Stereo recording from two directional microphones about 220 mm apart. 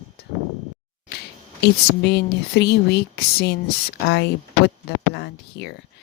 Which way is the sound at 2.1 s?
50° left (ahead or behind).